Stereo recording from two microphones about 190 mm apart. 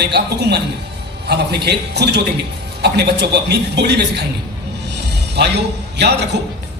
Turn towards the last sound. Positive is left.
turn(degrees=-65)  # may be behind; listen again after turning